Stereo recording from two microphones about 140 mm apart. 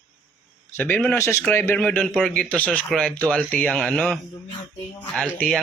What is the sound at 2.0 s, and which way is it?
A man's voice, centre (ahead or behind).